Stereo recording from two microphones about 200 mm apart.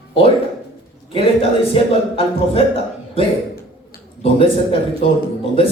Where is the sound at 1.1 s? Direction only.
25° left (ahead or behind).